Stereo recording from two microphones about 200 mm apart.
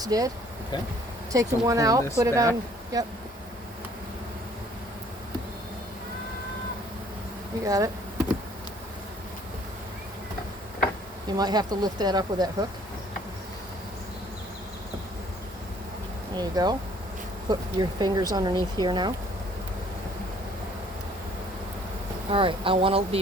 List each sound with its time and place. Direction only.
0.0 s speech: 20° right (ahead or behind)
1.3 s speech: 15° right (ahead or behind)
7.6 s speech: 15° right (ahead or behind)
11.3 s speech: 20° right (ahead or behind)
16.3 s speech: 20° right (ahead or behind)
22.3 s speech: 25° right (ahead or behind)